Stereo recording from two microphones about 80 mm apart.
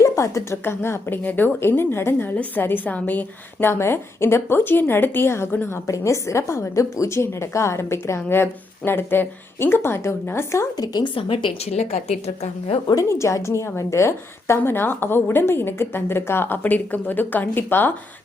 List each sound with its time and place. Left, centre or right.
0.0 s a woman's voice: left
10.8 s a woman's voice: left
12.9 s a woman's voice: left